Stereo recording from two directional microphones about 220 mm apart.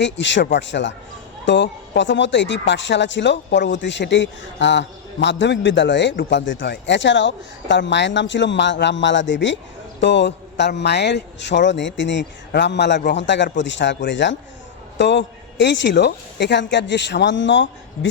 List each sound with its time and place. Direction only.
0.0 s speech: 55° left (ahead or behind)
13.1 s speech: 55° left (ahead or behind)